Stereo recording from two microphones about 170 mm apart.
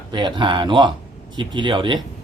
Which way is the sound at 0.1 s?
25° right (ahead or behind).